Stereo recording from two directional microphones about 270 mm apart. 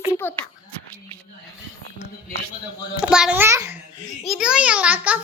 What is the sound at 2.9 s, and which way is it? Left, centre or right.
A child's voice, centre.